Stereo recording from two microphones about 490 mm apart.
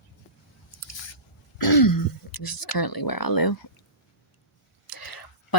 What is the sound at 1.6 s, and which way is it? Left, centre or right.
Throat clearing, left.